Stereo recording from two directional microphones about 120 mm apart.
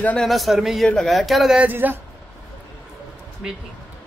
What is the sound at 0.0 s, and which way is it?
Speech, 5° left (ahead or behind).